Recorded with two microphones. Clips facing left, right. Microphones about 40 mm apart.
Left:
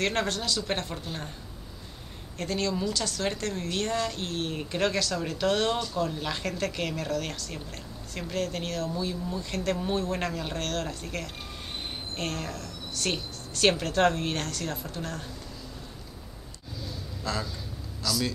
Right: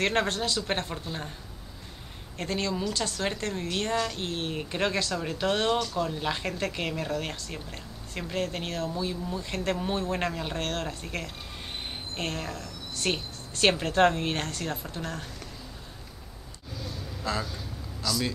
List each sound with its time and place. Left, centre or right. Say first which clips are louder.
0.0 s speech: right 2 dB; right
2.3 s speech: left 1 dB; right
17.2 s speech: right 1 dB; centre
18.0 s speech: even; centre